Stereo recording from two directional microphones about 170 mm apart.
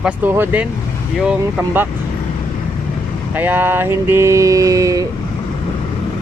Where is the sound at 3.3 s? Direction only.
10° right (ahead or behind).